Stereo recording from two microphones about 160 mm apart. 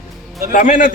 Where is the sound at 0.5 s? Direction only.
55° left (ahead or behind).